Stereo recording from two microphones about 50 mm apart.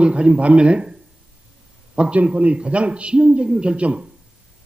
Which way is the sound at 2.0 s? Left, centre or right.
Right.